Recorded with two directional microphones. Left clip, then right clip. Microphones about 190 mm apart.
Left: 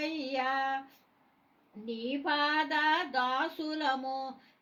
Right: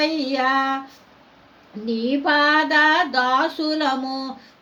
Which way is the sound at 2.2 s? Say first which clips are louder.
Right 12 dB; 40° right (ahead or behind).